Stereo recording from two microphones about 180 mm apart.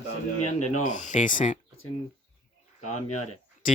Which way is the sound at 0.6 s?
45° left (ahead or behind).